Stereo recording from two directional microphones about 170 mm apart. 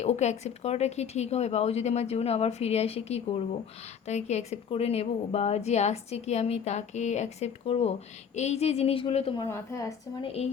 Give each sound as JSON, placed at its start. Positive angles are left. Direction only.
{"t": 0.0, "sound": "a woman's voice", "side_deg": 40}